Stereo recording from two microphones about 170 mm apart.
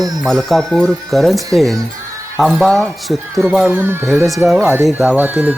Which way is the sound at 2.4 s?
Centre (ahead or behind).